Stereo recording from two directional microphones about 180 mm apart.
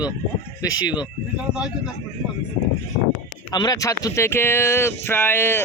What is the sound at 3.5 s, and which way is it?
Speech, 20° left (ahead or behind).